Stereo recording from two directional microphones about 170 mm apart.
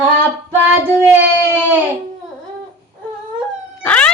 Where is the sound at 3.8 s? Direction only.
5° left (ahead or behind).